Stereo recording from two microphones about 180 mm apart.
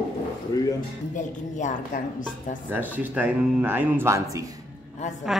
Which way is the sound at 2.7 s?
10° right (ahead or behind).